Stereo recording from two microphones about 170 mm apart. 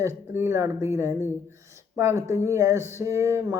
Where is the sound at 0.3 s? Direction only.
15° right (ahead or behind).